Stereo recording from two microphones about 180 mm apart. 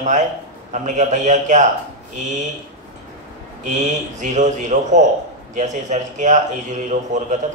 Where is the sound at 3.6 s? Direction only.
40° right (ahead or behind).